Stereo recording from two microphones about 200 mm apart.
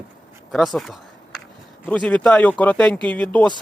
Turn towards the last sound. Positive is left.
turn(degrees=5)  # may be behind; listen again after turning